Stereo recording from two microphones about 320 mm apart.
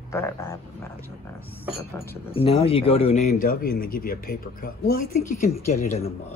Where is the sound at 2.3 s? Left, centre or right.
Centre.